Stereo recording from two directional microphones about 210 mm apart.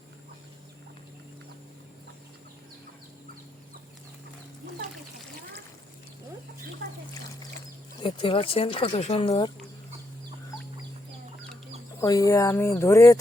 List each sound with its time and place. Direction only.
8.0 s speech: 25° left (ahead or behind)
11.9 s speech: 15° left (ahead or behind)